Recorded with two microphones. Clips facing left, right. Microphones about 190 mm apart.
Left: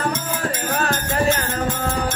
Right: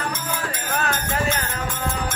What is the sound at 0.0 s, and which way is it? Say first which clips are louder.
Music: left 4 dB; 40° left (ahead or behind).